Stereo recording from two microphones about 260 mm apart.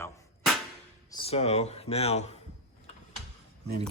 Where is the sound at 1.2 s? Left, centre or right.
Left.